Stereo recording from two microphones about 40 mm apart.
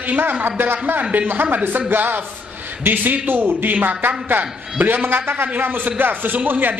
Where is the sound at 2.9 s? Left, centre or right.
Right.